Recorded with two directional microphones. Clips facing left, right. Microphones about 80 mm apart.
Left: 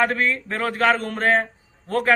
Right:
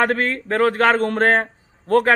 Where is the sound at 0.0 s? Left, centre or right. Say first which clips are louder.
Right 2 dB; right.